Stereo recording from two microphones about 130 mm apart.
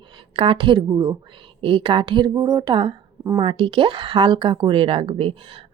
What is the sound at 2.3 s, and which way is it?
Speech, 25° right (ahead or behind).